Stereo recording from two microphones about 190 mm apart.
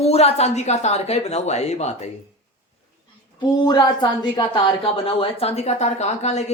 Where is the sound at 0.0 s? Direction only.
30° left (ahead or behind).